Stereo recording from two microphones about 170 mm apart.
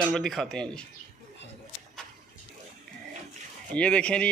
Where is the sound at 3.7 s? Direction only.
5° left (ahead or behind).